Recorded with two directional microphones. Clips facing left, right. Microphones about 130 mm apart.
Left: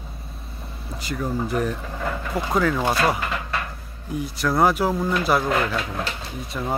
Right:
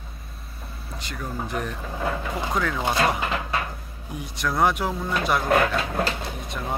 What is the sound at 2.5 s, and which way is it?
Speech, 5° left (ahead or behind).